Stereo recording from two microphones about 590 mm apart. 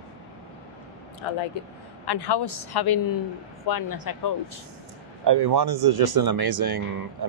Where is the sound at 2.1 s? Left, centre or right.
Left.